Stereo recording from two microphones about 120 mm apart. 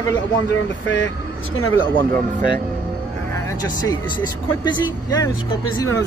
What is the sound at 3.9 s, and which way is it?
Speech, 35° left (ahead or behind).